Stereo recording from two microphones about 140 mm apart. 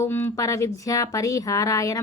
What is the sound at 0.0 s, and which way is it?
Speech, 15° left (ahead or behind).